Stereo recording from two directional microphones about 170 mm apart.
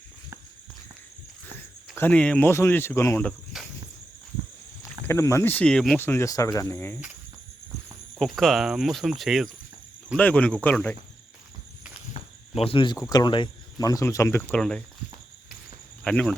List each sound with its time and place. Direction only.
2.0 s speech: 10° left (ahead or behind)
3.6 s cricket: centre (ahead or behind)
4.8 s speech: 15° left (ahead or behind)
8.2 s speech: centre (ahead or behind)
12.5 s speech: 30° left (ahead or behind); by 14.6 s 15° left (ahead or behind)
16.0 s speech: 5° left (ahead or behind)